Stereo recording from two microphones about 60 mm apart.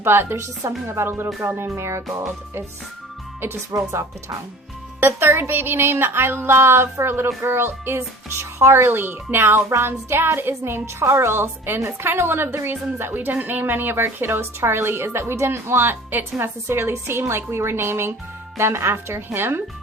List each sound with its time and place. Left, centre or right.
0.0 s a woman's voice: right
3.7 s a woman's voice: right
4.9 s a woman's voice: right